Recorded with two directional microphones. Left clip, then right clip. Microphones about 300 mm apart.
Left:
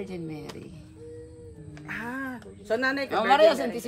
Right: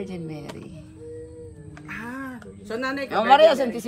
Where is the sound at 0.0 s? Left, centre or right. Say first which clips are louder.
Right 2 dB; centre.